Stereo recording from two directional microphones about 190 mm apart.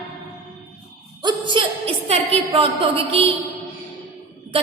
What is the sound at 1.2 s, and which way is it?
A woman's voice, 25° right (ahead or behind).